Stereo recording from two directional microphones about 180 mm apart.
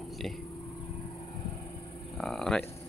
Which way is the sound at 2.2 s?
Centre (ahead or behind).